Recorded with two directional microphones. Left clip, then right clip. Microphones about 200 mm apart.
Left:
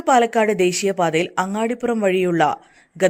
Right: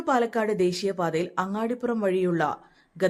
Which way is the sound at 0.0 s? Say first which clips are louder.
Left 9 dB; 20° left (ahead or behind).